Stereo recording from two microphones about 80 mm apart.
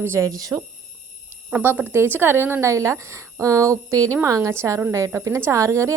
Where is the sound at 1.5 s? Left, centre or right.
Right.